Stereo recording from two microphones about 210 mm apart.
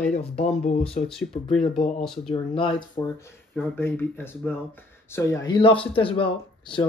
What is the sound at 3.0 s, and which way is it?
Speech, 15° left (ahead or behind).